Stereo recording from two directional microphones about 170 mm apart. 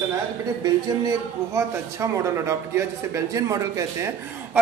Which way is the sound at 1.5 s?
15° right (ahead or behind).